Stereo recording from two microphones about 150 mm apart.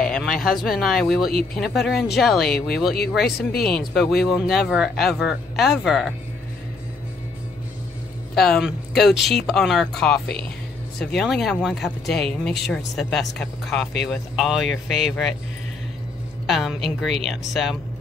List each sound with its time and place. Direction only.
0.0 s speech: 5° left (ahead or behind)
3.2 s speech: 90° left
3.5 s speech: centre (ahead or behind)
8.4 s speech: centre (ahead or behind)
16.4 s speech: centre (ahead or behind)